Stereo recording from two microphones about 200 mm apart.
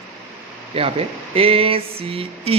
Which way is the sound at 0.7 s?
30° right (ahead or behind).